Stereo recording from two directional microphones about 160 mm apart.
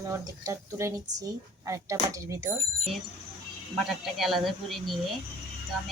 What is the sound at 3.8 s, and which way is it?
Speech, centre (ahead or behind).